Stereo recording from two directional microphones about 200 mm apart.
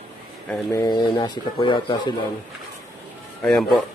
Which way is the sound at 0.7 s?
20° left (ahead or behind).